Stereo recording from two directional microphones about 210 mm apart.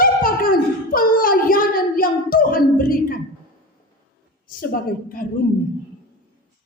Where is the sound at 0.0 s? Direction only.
40° left (ahead or behind).